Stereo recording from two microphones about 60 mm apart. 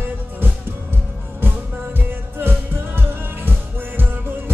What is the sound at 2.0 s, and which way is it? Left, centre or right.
Music, right.